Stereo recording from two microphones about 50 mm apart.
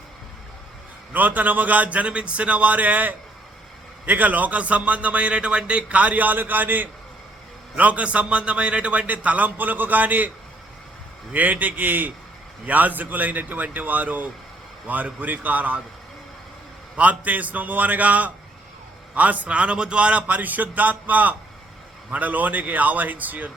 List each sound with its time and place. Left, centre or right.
1.1 s a man's voice: right
17.0 s a man's voice: right